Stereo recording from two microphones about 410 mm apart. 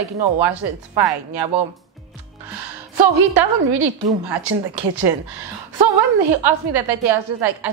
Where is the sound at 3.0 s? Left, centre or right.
Right.